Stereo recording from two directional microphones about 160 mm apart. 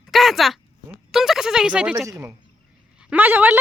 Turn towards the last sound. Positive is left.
turn(degrees=-10)  # may be behind; listen again after turning